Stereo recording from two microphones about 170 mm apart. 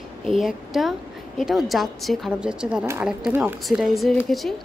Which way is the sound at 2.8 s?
15° right (ahead or behind).